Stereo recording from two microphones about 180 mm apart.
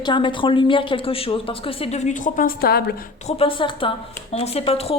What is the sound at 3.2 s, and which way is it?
A woman's voice, 30° left (ahead or behind).